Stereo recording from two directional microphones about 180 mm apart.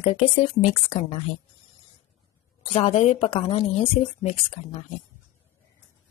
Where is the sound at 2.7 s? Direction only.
35° left (ahead or behind).